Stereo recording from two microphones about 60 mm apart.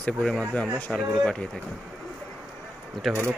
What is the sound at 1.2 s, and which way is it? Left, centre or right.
Speech, centre.